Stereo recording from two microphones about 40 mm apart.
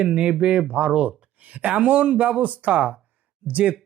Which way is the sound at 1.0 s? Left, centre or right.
Right.